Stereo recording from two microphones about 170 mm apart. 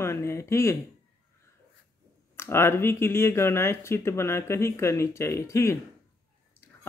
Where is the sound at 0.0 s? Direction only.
15° left (ahead or behind).